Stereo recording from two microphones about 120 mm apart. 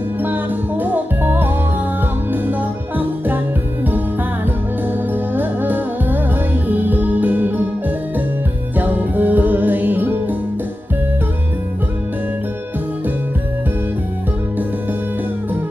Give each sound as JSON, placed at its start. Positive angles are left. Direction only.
{"t": 0.2, "sound": "music", "side_deg": -15}